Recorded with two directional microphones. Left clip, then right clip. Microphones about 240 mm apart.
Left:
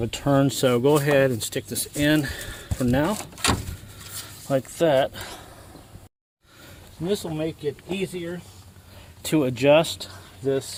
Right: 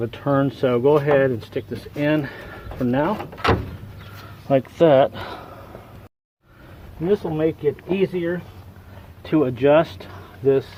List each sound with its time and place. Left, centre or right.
0.0 s speech: left
4.8 s speech: centre
7.0 s speech: left
7.6 s speech: centre
9.2 s speech: left
9.8 s speech: centre